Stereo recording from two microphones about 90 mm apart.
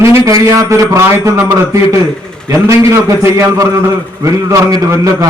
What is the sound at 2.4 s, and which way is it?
A man's voice, 35° right (ahead or behind).